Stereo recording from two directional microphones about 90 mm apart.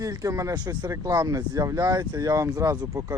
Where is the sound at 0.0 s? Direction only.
40° right (ahead or behind).